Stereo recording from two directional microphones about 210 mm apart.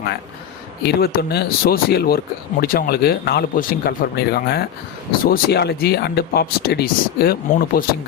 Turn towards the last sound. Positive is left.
turn(degrees=45)  # may be behind; listen again after turning